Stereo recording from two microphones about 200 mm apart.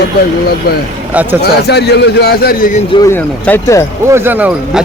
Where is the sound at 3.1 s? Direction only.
10° left (ahead or behind).